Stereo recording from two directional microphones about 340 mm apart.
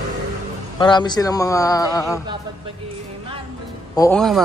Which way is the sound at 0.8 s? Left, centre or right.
Centre.